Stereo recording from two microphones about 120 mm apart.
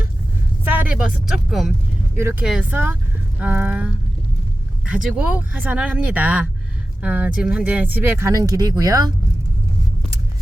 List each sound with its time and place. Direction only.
0.6 s speech: 15° right (ahead or behind)
2.1 s speech: 20° right (ahead or behind)
2.4 s speech: 5° right (ahead or behind); by 9.1 s 30° right (ahead or behind)